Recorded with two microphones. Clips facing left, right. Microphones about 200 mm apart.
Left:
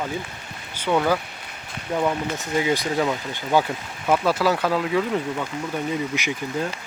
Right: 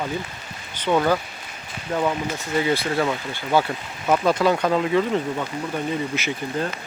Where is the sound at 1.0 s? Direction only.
Centre (ahead or behind); by 3.7 s 15° left (ahead or behind).